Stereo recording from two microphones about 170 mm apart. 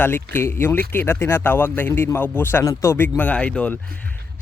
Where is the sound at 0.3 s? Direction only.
15° left (ahead or behind).